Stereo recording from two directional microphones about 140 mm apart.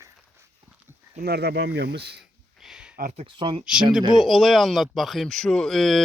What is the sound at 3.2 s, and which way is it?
Speech, 35° right (ahead or behind).